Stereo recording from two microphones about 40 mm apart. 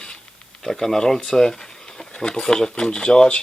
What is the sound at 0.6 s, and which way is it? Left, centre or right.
Speech, centre.